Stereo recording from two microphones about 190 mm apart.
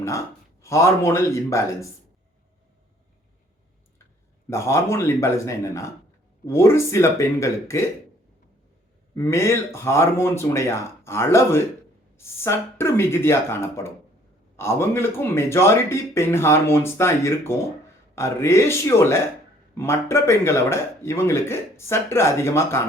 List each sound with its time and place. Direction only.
0.6 s speech: 15° left (ahead or behind)
4.4 s speech: 15° left (ahead or behind)
9.1 s speech: 15° left (ahead or behind)